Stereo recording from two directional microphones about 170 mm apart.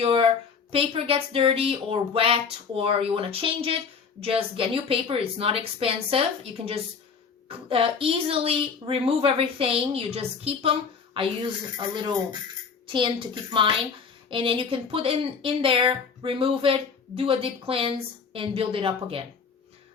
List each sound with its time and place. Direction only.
0.0 s speech: 30° right (ahead or behind)
12.9 s a woman's voice: 30° right (ahead or behind)